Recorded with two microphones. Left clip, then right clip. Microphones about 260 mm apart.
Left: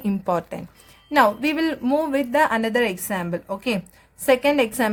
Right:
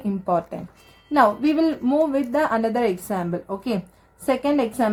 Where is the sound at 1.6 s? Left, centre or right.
Left.